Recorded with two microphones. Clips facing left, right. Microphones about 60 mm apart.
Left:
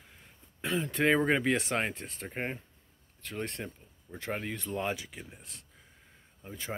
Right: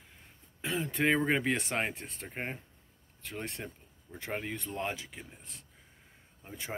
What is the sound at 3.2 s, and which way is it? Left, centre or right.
Speech, centre.